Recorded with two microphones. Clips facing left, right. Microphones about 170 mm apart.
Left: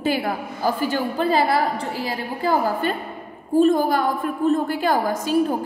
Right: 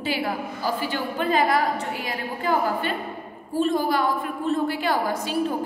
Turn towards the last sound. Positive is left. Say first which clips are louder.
# left 3 dB
turn(degrees=45)  # may be behind; listen again after turning